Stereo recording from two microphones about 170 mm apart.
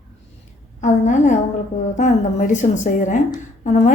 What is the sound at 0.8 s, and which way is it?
A woman's voice, 45° left (ahead or behind).